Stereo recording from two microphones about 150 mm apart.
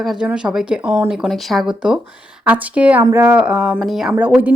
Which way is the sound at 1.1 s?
Centre (ahead or behind).